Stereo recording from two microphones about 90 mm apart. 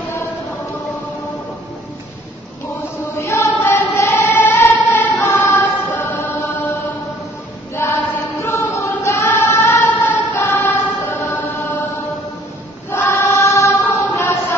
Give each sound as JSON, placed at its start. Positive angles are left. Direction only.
{"t": 3.2, "sound": "choir", "side_deg": 30}
{"t": 7.7, "sound": "choir", "side_deg": 35}
{"t": 9.8, "sound": "choir", "side_deg": 20}
{"t": 10.4, "sound": "choir", "side_deg": 30}
{"t": 12.9, "sound": "choir", "side_deg": 30}
{"t": 14.1, "sound": "a sound", "side_deg": 30}